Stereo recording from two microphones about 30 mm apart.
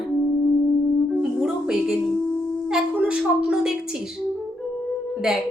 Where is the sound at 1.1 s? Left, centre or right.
Centre.